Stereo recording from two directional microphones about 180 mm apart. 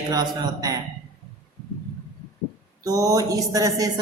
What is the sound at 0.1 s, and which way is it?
Speech, 20° right (ahead or behind).